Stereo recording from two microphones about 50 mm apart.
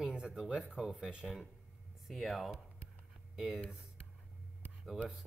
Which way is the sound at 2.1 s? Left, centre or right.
Centre.